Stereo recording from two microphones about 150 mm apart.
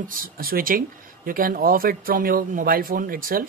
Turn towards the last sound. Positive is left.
turn(degrees=-75)  # may be behind; listen again after turning